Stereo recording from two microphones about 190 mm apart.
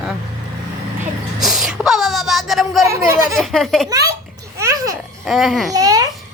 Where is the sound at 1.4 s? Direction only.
Centre (ahead or behind).